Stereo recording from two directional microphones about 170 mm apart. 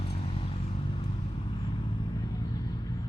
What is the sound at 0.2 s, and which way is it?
Vehicle, 35° left (ahead or behind).